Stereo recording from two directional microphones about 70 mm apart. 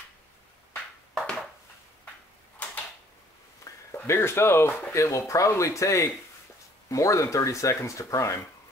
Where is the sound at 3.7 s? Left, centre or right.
Left.